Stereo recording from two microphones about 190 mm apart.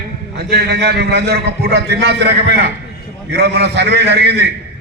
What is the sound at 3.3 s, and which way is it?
A man's voice, 60° right (ahead or behind).